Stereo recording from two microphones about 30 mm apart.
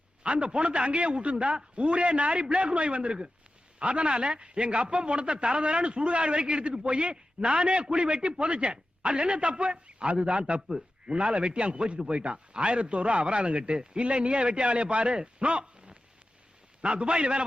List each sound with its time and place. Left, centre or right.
0.3 s a man's voice: right